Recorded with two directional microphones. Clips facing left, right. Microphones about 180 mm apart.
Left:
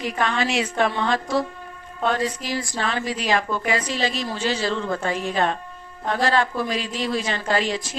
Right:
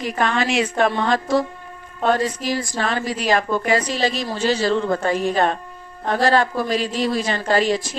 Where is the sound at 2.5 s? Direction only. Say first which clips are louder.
Right 3 dB; 45° right (ahead or behind).